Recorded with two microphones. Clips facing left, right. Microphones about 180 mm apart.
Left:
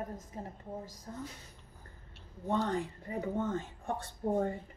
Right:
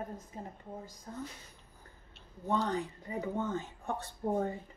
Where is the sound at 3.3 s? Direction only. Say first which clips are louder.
Left 1 dB; 30° left (ahead or behind).